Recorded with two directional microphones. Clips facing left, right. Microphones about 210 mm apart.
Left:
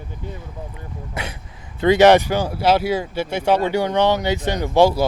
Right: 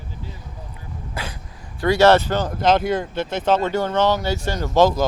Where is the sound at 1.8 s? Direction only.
20° left (ahead or behind).